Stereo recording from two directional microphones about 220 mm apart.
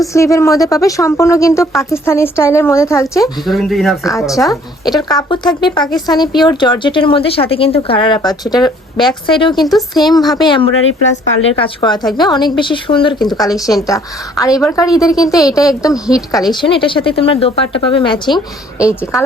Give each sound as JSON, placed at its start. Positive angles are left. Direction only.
{"t": 0.1, "sound": "speech", "side_deg": 15}
{"t": 3.4, "sound": "speech", "side_deg": 0}
{"t": 4.4, "sound": "speech", "side_deg": 15}